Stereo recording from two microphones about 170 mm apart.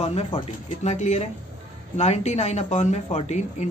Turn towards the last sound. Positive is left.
turn(degrees=45)  # may be behind; listen again after turning